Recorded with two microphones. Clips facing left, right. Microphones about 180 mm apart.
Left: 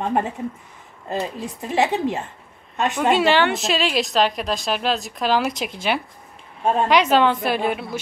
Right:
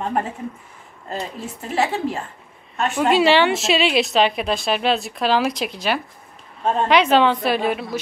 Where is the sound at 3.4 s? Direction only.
5° right (ahead or behind).